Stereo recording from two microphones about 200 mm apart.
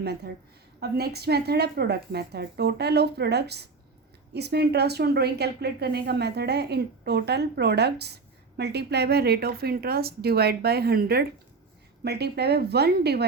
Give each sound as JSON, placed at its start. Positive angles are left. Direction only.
{"t": 0.8, "sound": "a woman's voice", "side_deg": -50}